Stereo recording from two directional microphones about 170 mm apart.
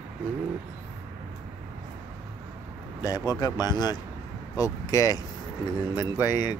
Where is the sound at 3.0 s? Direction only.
20° left (ahead or behind).